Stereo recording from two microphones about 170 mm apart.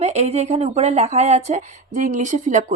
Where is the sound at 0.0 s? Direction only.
40° right (ahead or behind).